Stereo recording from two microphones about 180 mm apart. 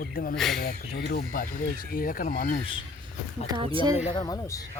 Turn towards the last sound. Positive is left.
turn(degrees=20)  # may be behind; listen again after turning